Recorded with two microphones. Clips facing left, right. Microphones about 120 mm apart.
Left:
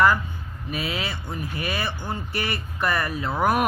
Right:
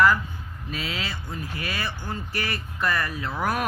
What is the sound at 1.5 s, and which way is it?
Speech, 20° left (ahead or behind).